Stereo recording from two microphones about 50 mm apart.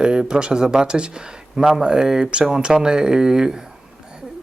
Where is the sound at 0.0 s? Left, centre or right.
Centre.